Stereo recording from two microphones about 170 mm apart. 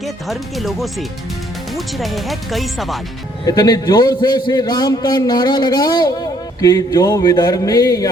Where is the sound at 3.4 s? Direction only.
25° left (ahead or behind).